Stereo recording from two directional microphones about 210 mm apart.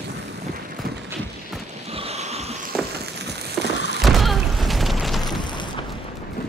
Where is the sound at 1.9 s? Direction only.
30° right (ahead or behind).